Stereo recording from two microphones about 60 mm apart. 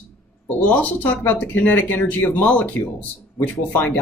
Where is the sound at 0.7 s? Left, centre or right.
Left.